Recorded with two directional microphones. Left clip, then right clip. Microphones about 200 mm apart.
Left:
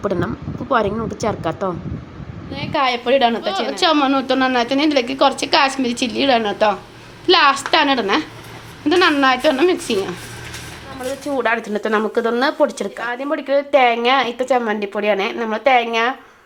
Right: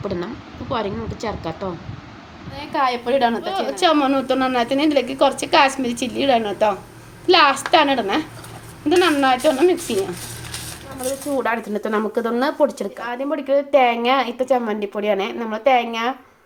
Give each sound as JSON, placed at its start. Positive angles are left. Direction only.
{"t": 0.0, "sound": "speech", "side_deg": 25}
{"t": 2.6, "sound": "a woman's voice", "side_deg": 10}
{"t": 3.7, "sound": "speech", "side_deg": -5}
{"t": 11.3, "sound": "speech", "side_deg": 0}